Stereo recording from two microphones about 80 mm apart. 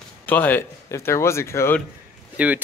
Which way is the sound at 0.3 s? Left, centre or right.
Left.